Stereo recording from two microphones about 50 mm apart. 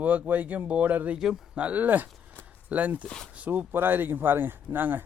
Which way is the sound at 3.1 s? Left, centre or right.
Centre.